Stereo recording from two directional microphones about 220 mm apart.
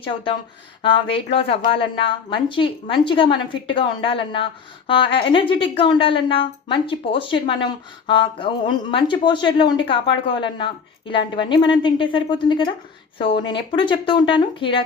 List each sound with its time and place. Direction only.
0.8 s a woman's voice: 20° left (ahead or behind)